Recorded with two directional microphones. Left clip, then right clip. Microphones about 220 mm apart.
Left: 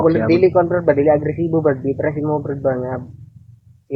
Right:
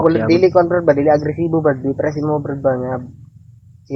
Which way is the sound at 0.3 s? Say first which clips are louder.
Right 1 dB; 50° right (ahead or behind).